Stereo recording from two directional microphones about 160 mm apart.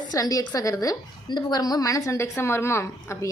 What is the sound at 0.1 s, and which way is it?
A woman's voice, 25° left (ahead or behind).